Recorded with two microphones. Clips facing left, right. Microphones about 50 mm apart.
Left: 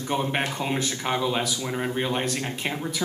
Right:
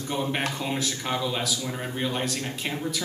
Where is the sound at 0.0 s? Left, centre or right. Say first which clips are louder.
Left 2 dB; left.